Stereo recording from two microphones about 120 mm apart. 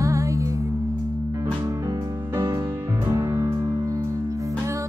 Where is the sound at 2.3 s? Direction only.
20° right (ahead or behind).